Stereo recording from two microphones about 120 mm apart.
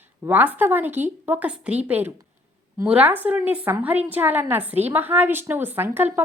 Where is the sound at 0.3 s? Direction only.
15° right (ahead or behind).